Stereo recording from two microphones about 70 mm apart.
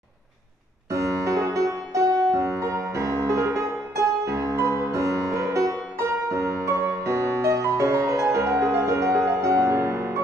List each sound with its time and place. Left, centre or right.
0.9 s music: right